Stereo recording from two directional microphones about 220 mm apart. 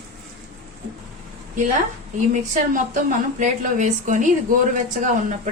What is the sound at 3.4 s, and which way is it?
Speech, 35° right (ahead or behind).